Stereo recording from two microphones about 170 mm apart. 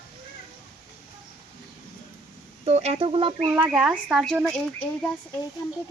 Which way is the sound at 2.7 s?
40° right (ahead or behind).